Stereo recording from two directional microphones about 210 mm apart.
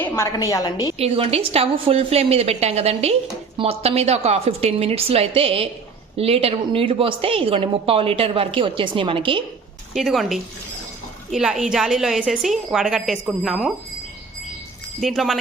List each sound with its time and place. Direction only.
0.0 s a woman's voice: 15° left (ahead or behind)
0.9 s a woman's voice: 30° right (ahead or behind)
9.9 s a woman's voice: centre (ahead or behind)
15.0 s a woman's voice: centre (ahead or behind)